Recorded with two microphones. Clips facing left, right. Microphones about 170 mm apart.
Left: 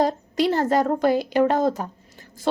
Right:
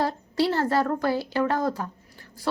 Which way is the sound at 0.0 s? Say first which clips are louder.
Left 3 dB; 20° left (ahead or behind).